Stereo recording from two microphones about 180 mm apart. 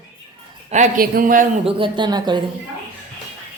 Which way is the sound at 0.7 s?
40° right (ahead or behind).